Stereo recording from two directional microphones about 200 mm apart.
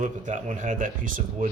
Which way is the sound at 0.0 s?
40° right (ahead or behind).